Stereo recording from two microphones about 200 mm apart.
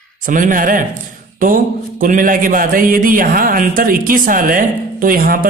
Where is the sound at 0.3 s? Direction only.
40° right (ahead or behind).